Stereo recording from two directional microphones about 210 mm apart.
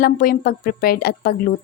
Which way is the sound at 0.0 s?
45° left (ahead or behind).